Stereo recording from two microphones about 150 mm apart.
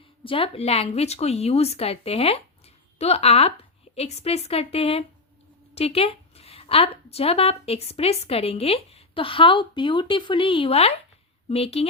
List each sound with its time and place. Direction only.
0.3 s a woman's voice: 40° left (ahead or behind)